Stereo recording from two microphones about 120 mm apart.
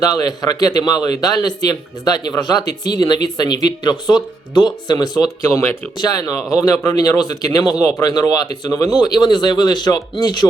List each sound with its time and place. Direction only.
0.0 s a man's voice: 30° left (ahead or behind)